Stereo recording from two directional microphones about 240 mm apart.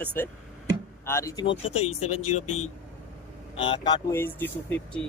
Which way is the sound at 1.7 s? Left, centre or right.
Left.